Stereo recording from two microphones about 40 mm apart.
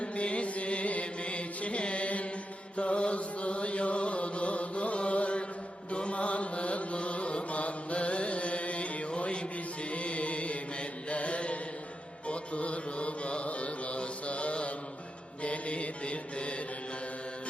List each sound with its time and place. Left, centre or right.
0.0 s music: left
11.1 s mantra: left